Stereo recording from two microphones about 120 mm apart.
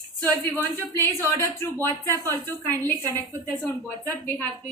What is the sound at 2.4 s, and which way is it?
A woman's voice, 15° left (ahead or behind).